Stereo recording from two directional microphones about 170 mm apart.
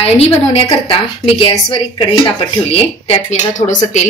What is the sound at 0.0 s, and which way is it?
A woman's voice, 35° left (ahead or behind).